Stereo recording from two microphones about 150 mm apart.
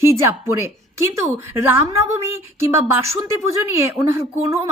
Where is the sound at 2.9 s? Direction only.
20° right (ahead or behind).